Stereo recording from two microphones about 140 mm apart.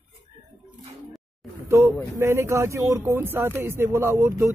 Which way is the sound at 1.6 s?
20° right (ahead or behind).